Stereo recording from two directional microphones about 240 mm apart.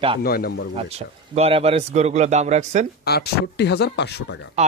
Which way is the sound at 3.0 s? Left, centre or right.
Left.